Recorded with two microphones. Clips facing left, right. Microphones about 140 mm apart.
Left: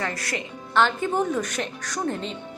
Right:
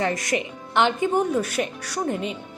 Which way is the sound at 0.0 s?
20° right (ahead or behind).